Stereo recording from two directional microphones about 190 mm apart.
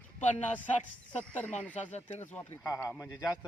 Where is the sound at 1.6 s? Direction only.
10° left (ahead or behind).